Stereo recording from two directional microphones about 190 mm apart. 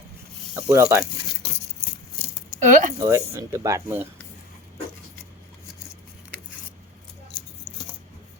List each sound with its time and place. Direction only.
0.5 s speech: 15° right (ahead or behind)
2.6 s speech: 40° right (ahead or behind)
3.0 s speech: 15° right (ahead or behind)